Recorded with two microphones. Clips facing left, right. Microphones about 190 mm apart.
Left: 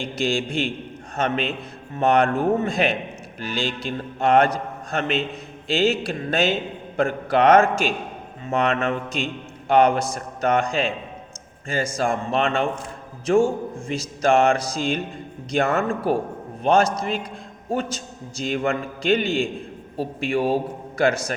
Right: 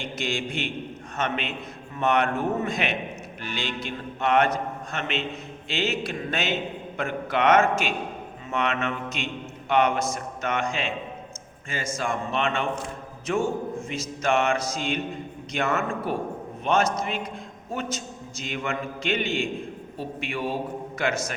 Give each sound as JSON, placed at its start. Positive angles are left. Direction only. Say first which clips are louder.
{"t": 0.0, "sound": "a man's voice", "louder": "left 6 dB", "side_deg": 35}